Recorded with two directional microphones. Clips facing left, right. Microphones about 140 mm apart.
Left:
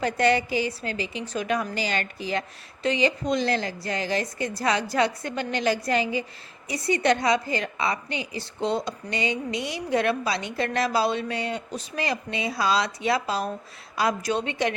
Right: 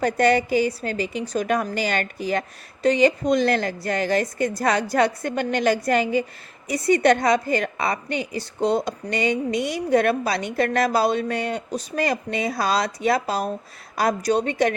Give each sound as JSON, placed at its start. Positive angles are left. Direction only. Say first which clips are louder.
{"t": 0.0, "sound": "a woman's voice", "louder": "right 3 dB", "side_deg": -45}